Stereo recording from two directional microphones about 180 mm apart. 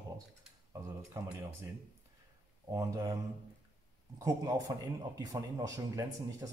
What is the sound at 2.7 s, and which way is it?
Speech, 20° right (ahead or behind).